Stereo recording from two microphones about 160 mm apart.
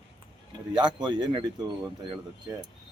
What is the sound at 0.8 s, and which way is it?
Speech, 30° right (ahead or behind).